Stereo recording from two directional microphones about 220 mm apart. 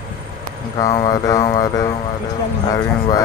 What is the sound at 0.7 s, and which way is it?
Speech, 15° left (ahead or behind).